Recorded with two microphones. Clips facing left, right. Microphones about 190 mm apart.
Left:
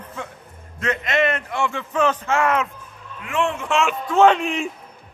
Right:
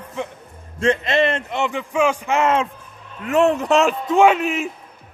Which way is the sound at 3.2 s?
40° right (ahead or behind).